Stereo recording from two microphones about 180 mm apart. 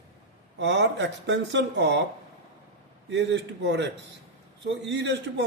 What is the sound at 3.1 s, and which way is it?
A man's voice, 75° right (ahead or behind).